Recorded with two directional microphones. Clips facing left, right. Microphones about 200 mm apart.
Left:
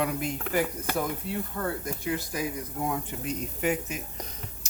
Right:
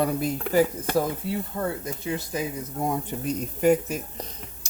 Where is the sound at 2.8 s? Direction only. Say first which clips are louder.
Right 5 dB; 40° right (ahead or behind).